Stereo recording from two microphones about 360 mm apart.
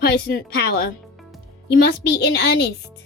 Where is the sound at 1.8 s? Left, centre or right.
Left.